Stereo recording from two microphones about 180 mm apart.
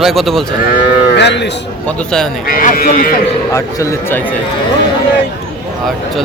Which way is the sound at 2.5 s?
50° left (ahead or behind).